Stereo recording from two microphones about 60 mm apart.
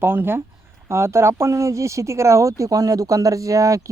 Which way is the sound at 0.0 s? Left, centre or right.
Right.